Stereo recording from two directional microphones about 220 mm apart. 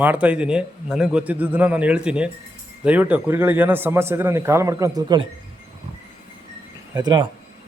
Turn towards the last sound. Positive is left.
turn(degrees=-20)  # may be behind; listen again after turning